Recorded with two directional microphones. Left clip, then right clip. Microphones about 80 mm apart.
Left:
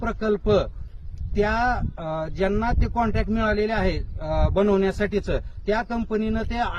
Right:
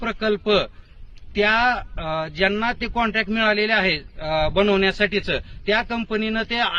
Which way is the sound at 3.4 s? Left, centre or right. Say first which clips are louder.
Right 4 dB; left.